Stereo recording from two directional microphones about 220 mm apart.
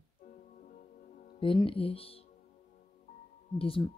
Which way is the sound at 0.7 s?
35° left (ahead or behind).